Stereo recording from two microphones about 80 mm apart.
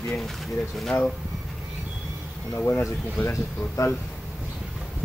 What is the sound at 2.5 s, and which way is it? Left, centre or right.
Speech, left.